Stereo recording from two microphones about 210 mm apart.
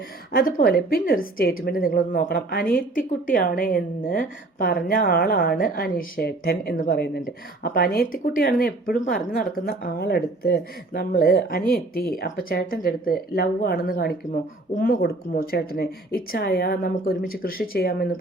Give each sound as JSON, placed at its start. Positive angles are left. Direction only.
{"t": 0.3, "sound": "a woman's voice", "side_deg": 45}